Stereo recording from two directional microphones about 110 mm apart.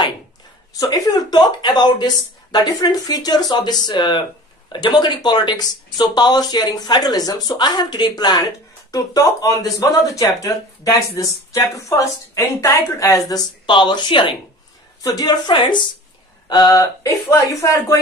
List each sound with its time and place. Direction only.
0.7 s speech: 35° left (ahead or behind)
15.0 s speech: 35° left (ahead or behind)
16.4 s a sound: 35° left (ahead or behind)
16.8 s speech: 30° left (ahead or behind)